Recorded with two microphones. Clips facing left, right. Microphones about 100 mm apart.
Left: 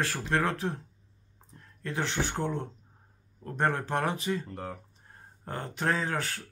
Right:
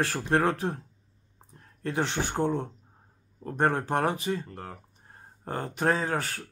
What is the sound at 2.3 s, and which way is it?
Speech, 45° right (ahead or behind).